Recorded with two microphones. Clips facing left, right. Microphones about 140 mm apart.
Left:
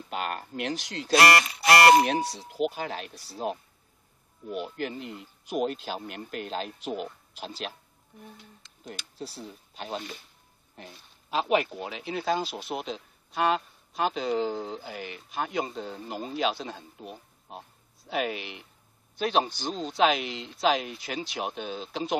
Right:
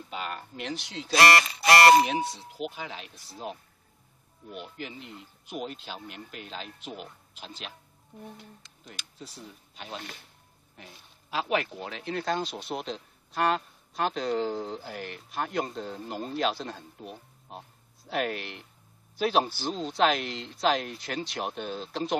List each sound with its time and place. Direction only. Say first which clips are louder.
0.1 s a sound: left 4 dB; 55° left (ahead or behind)
1.1 s speech: left 1 dB; centre (ahead or behind)
2.2 s speech: left 6 dB; 35° left (ahead or behind)
4.5 s speech: left 7 dB; 5° left (ahead or behind)
4.7 s speech: left 7 dB; 50° left (ahead or behind)
5.0 s speech: left 5 dB; centre (ahead or behind)
5.5 s speech: left 7 dB; 50° left (ahead or behind)
9.2 s speech: left 5 dB; 30° left (ahead or behind)
11.2 s speech: left 3 dB; 20° left (ahead or behind); by 22.1 s centre (ahead or behind)